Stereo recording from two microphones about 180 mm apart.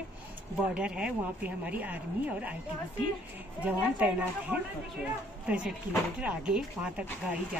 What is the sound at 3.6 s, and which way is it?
Speech, 5° right (ahead or behind).